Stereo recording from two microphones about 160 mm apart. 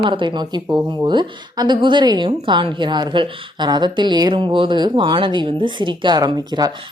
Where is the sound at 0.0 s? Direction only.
30° right (ahead or behind).